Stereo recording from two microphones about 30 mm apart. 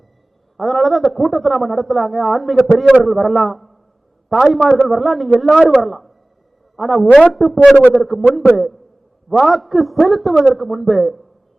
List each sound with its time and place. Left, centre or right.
0.5 s a man's voice: centre